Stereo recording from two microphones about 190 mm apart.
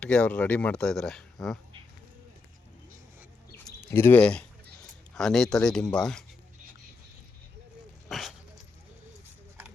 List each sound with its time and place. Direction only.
0.0 s speech: 5° left (ahead or behind)
3.9 s speech: 10° left (ahead or behind)
8.1 s dog: centre (ahead or behind)